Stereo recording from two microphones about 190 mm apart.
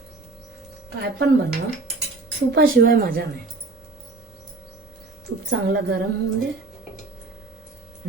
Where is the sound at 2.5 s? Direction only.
50° right (ahead or behind).